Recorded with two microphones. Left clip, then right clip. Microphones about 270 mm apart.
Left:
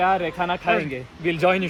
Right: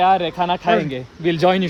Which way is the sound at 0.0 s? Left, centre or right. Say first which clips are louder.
Right 5 dB; right.